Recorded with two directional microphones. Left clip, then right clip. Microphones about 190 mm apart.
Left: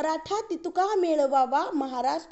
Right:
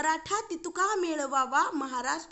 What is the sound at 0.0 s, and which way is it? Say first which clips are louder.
A woman's voice: left 1 dB; centre (ahead or behind).